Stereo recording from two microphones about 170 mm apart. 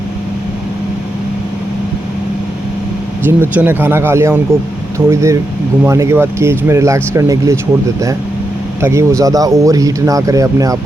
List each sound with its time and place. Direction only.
3.2 s speech: 10° right (ahead or behind)
8.8 s speech: 15° right (ahead or behind)